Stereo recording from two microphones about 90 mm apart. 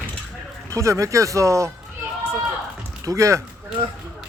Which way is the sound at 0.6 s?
35° right (ahead or behind).